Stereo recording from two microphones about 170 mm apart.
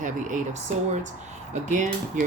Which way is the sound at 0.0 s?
50° right (ahead or behind).